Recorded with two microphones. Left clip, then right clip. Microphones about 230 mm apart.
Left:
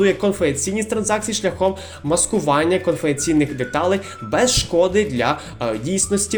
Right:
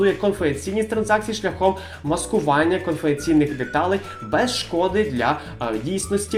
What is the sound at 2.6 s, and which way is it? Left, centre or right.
Speech, left.